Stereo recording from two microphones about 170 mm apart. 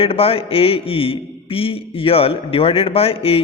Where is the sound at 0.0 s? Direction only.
35° left (ahead or behind).